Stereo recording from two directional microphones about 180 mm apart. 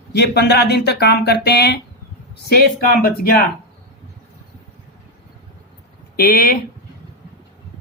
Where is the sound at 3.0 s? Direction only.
55° left (ahead or behind).